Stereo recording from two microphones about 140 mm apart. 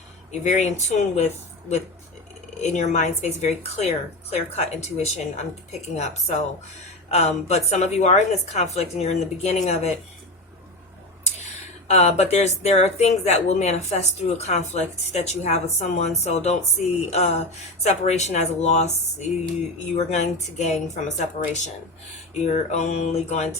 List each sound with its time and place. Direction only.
0.3 s speech: 55° left (ahead or behind)
2.6 s speech: 55° left (ahead or behind)
11.9 s a woman's voice: 50° left (ahead or behind)